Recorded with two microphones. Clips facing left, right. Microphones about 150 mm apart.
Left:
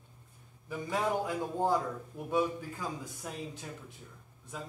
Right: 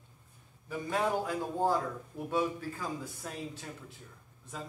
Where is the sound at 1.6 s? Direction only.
15° left (ahead or behind).